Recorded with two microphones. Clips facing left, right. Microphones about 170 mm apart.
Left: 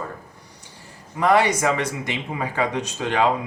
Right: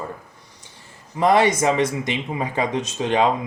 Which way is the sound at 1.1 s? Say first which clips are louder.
Right 2 dB; 20° right (ahead or behind).